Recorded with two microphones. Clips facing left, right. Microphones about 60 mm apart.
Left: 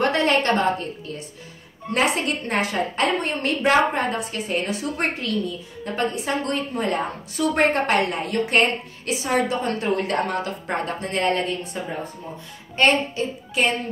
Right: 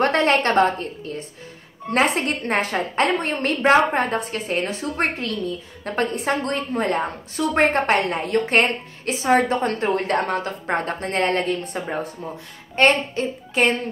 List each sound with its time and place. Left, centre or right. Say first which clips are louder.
0.2 s a woman's voice: right 1 dB; right
1.9 s a woman's voice: right 2 dB; right
5.9 s a woman's voice: right 2 dB; right